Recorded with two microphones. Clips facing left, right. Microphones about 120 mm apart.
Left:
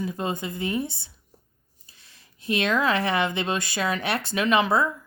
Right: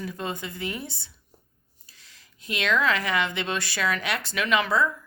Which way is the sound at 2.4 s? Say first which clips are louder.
Left 2 dB; 25° left (ahead or behind).